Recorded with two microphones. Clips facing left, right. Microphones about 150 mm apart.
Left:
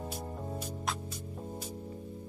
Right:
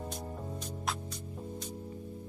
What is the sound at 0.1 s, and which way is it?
Music, 5° left (ahead or behind).